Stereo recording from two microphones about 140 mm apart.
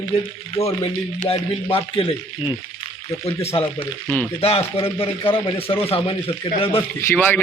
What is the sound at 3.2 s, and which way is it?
Speech, 40° left (ahead or behind).